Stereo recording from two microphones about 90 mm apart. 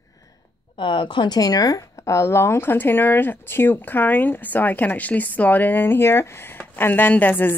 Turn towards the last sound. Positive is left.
turn(degrees=20)  # may be behind; listen again after turning